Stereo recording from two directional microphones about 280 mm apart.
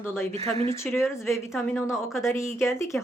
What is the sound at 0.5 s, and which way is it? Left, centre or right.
Speech, right.